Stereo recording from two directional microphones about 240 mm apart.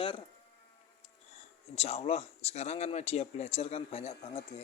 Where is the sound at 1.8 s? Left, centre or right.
Left.